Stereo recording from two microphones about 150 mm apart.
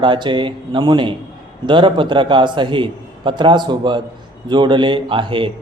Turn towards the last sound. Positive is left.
turn(degrees=-35)  # may be behind; listen again after turning